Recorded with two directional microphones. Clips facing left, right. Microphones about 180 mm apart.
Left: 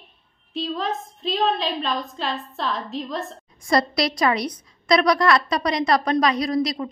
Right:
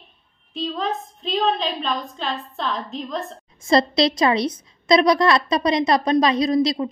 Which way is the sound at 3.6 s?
25° right (ahead or behind).